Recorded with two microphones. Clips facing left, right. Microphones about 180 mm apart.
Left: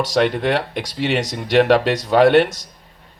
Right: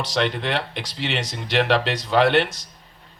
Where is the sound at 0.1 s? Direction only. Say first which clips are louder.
Left 4 dB; 45° left (ahead or behind).